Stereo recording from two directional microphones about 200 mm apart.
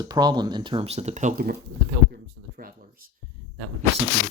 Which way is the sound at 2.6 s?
45° right (ahead or behind).